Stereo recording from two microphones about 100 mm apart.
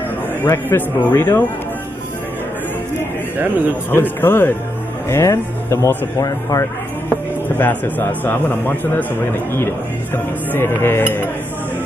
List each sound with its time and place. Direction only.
0.5 s a man's voice: 20° left (ahead or behind)
3.3 s a man's voice: 20° right (ahead or behind)
3.9 s a man's voice: 20° left (ahead or behind)